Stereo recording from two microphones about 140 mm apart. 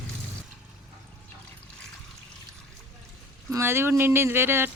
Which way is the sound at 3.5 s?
20° right (ahead or behind).